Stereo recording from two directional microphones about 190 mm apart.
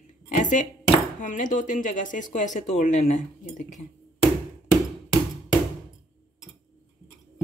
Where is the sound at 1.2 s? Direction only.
40° left (ahead or behind).